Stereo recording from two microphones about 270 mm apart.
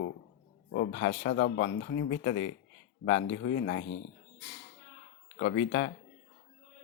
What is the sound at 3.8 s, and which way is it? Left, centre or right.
Speech, left.